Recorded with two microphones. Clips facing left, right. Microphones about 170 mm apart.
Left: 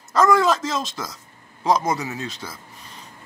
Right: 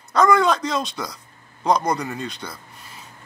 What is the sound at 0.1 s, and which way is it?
Speech, centre (ahead or behind).